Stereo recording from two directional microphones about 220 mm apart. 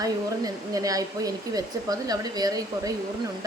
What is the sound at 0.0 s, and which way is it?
Speech, 15° right (ahead or behind).